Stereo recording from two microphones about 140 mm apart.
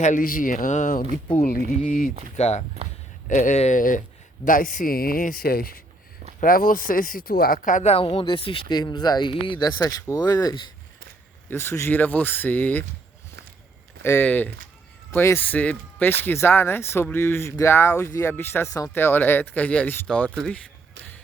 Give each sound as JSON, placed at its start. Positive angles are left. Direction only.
{"t": 0.0, "sound": "speech", "side_deg": 70}
{"t": 1.4, "sound": "speech", "side_deg": 90}
{"t": 2.3, "sound": "speech", "side_deg": 55}
{"t": 3.2, "sound": "speech", "side_deg": 65}
{"t": 7.9, "sound": "speech", "side_deg": 45}
{"t": 14.0, "sound": "speech", "side_deg": 15}